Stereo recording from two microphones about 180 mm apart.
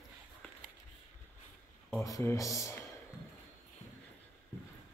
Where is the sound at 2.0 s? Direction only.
20° left (ahead or behind).